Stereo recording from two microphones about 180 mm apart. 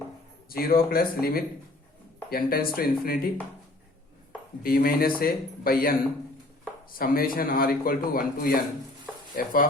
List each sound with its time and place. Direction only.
0.5 s speech: 55° left (ahead or behind)
4.6 s a man's voice: 55° left (ahead or behind)